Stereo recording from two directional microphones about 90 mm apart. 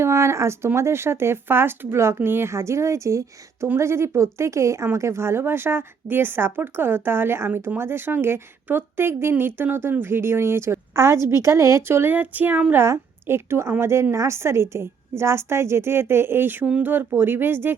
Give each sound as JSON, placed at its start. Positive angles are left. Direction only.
{"t": 0.0, "sound": "speech", "side_deg": -30}